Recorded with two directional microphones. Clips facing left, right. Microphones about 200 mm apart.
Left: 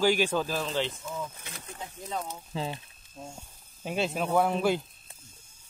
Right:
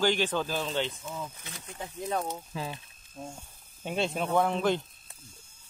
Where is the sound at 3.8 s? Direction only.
5° left (ahead or behind).